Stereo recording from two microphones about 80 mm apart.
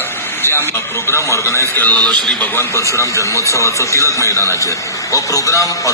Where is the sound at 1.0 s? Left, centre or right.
Left.